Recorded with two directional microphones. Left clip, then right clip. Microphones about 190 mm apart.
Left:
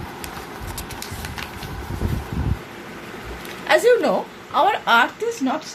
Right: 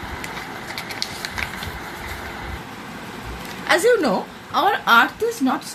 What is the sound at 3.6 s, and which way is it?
Speech, 35° right (ahead or behind).